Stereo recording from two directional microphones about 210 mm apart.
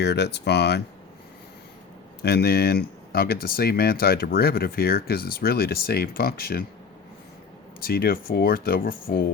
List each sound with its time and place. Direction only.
0.0 s speech: 55° left (ahead or behind)
2.2 s speech: 50° left (ahead or behind)
7.8 s speech: 45° left (ahead or behind)